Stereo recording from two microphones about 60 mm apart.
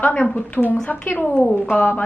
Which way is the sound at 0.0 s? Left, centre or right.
Left.